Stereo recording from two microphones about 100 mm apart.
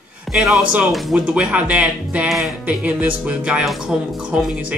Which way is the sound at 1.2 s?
15° right (ahead or behind).